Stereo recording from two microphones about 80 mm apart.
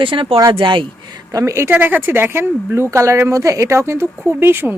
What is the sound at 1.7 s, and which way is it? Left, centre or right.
Speech, right.